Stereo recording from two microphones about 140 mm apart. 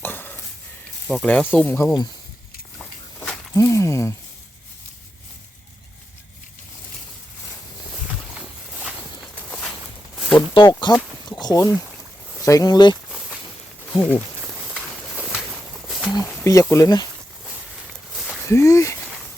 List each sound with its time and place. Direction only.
0.0 s a sound: 15° left (ahead or behind)
1.1 s speech: 10° left (ahead or behind)
3.5 s speech: 20° left (ahead or behind)
8.4 s walk: 5° right (ahead or behind)
10.3 s speech: 30° left (ahead or behind)
13.1 s a sound: 5° right (ahead or behind)
15.9 s a sound: 5° right (ahead or behind)
16.4 s speech: 20° left (ahead or behind)
18.4 s speech: 20° left (ahead or behind)